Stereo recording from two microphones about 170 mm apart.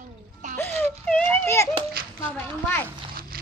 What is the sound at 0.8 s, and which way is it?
Speech, 10° left (ahead or behind).